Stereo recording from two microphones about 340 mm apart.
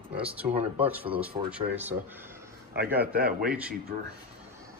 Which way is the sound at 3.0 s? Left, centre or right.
Right.